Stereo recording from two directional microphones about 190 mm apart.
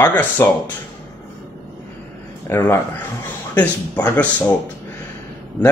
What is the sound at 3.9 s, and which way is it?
Speech, 15° left (ahead or behind).